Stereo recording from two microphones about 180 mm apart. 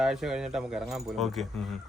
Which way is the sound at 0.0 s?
Centre (ahead or behind).